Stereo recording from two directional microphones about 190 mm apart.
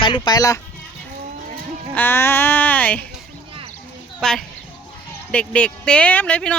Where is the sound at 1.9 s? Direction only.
10° left (ahead or behind).